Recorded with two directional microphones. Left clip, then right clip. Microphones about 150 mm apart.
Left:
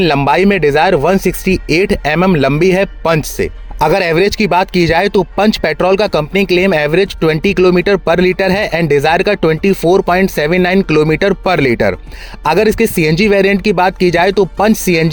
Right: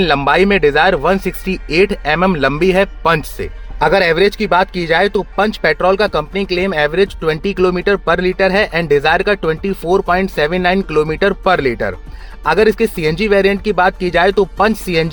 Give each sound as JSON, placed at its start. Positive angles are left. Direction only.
{"t": 0.3, "sound": "speech", "side_deg": 45}